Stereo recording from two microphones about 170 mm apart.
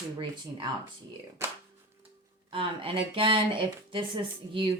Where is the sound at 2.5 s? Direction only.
30° right (ahead or behind).